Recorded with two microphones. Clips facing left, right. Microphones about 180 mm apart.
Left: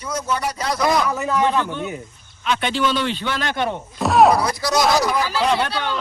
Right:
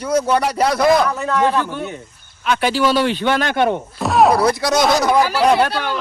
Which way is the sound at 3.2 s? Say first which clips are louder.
Right 6 dB; 60° right (ahead or behind).